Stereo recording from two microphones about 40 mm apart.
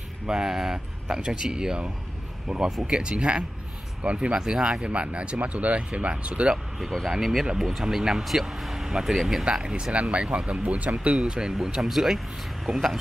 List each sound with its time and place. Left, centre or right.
0.3 s speech: centre
4.4 s speech: centre
4.8 s speech: right
7.1 s speech: centre
9.5 s speech: right
9.9 s speech: right
10.2 s speech: right
11.1 s speech: centre